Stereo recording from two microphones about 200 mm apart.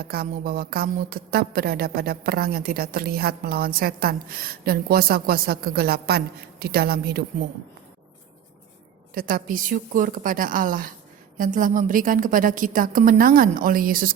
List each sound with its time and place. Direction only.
0.0 s a woman's voice: 50° right (ahead or behind)
9.1 s a woman's voice: 45° right (ahead or behind)